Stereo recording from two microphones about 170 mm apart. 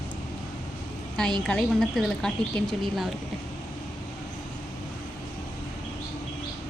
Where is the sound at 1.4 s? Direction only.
5° left (ahead or behind).